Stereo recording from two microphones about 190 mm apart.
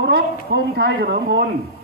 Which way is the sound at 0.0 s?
60° right (ahead or behind).